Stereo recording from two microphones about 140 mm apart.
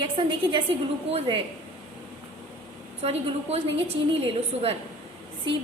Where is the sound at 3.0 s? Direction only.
45° right (ahead or behind).